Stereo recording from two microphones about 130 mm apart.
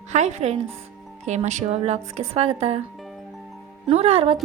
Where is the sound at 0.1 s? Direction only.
60° right (ahead or behind).